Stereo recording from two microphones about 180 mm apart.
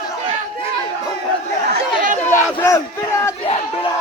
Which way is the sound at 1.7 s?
45° right (ahead or behind).